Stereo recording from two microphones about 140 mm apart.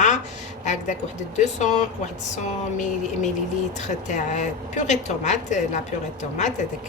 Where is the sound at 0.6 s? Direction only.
60° left (ahead or behind).